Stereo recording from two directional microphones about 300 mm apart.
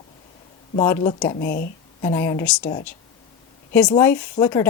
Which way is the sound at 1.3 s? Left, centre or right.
Left.